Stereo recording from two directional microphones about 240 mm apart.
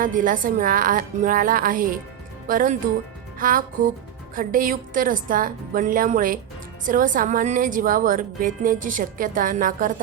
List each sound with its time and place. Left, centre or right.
0.0 s a woman's voice: right